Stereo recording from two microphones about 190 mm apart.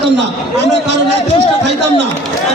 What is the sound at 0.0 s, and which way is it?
Speech, 65° right (ahead or behind).